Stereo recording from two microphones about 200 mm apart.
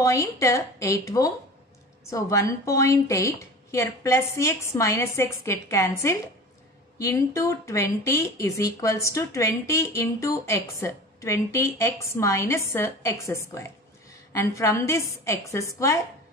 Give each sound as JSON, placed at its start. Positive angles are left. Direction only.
{"t": 0.0, "sound": "speech", "side_deg": 15}